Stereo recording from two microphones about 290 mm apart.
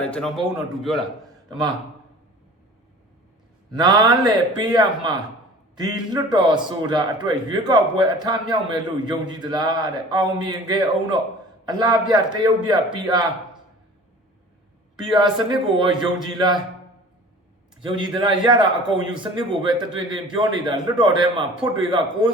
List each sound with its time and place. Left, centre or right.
0.0 s a man's voice: centre
1.5 s a man's voice: centre
3.8 s a man's voice: centre
14.9 s a man's voice: centre
17.7 s a man's voice: centre